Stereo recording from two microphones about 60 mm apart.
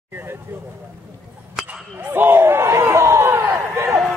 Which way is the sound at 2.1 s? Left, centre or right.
Right.